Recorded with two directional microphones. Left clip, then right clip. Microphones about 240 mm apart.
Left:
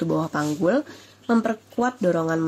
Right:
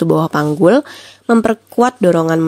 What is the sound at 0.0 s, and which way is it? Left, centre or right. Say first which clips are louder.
Speech: right 10 dB; right.